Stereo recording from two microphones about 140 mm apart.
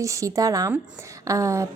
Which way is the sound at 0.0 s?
20° right (ahead or behind).